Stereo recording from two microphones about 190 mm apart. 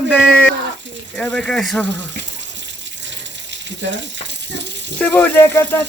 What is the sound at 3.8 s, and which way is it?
Speech, 70° right (ahead or behind).